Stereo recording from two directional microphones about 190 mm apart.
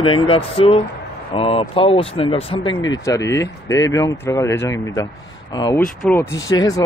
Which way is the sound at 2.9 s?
15° left (ahead or behind).